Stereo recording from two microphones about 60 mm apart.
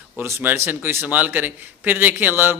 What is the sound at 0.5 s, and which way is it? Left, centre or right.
A man's voice, right.